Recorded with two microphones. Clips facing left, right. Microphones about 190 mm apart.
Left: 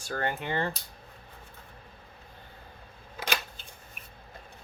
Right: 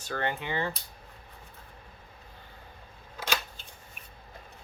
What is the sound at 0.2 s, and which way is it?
Speech, 50° left (ahead or behind).